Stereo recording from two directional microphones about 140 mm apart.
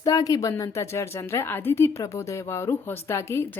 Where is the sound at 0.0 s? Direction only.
25° left (ahead or behind).